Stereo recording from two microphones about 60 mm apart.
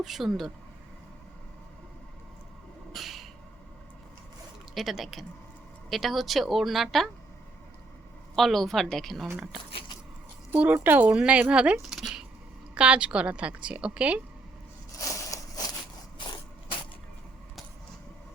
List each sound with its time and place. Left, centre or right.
0.0 s speech: centre
2.9 s a sound: centre
4.7 s speech: centre
8.4 s speech: centre
10.6 s a woman's voice: right
11.8 s a sound: centre
12.7 s a woman's voice: centre
15.0 s crushing: left